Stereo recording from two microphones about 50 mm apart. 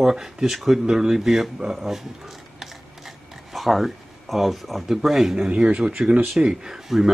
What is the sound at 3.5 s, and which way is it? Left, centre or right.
Speech, centre.